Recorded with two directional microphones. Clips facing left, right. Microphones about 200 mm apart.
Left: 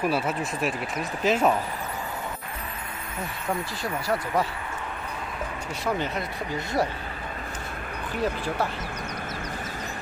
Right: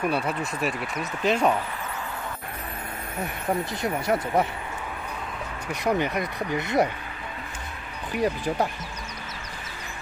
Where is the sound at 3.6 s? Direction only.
20° right (ahead or behind).